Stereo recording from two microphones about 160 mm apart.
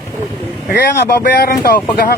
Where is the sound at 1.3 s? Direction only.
75° left (ahead or behind).